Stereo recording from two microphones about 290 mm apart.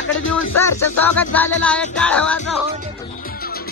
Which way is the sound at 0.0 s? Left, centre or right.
Left.